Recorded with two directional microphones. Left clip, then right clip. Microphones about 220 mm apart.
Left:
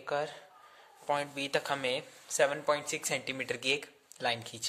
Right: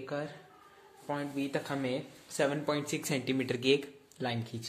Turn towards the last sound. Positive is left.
turn(degrees=25)  # may be behind; listen again after turning